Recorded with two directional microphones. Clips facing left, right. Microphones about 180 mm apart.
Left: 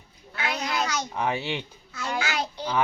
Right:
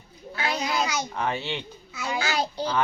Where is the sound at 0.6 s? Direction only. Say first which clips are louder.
Right 1 dB; 10° right (ahead or behind).